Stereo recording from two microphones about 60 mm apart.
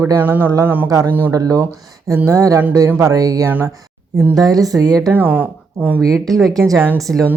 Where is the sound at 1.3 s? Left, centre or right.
Right.